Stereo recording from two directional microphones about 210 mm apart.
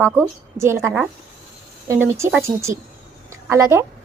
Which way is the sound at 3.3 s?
15° right (ahead or behind).